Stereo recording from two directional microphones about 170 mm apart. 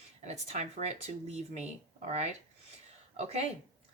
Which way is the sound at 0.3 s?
40° right (ahead or behind).